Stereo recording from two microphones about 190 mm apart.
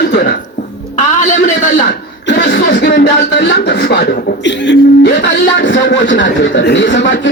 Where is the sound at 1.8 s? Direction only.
65° left (ahead or behind).